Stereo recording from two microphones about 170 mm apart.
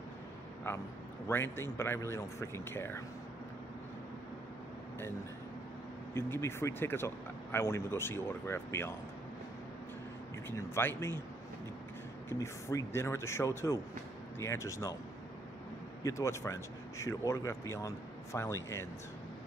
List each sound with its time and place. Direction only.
0.7 s speech: 15° left (ahead or behind)
6.1 s speech: 15° left (ahead or behind)
10.5 s speech: 15° left (ahead or behind)
12.3 s speech: 15° left (ahead or behind)
16.0 s speech: 15° left (ahead or behind)